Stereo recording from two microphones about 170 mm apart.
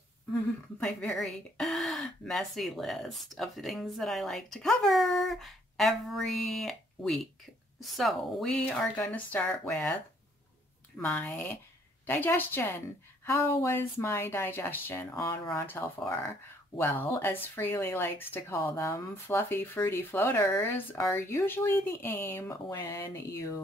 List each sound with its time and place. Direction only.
0.3 s speech: 5° left (ahead or behind)
11.0 s speech: 10° left (ahead or behind)